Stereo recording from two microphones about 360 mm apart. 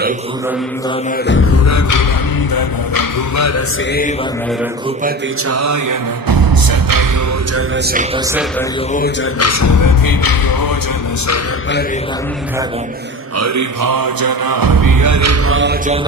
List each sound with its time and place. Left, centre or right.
1.3 s music: left
1.7 s music: left
5.5 s music: right
9.4 s music: left
13.4 s music: right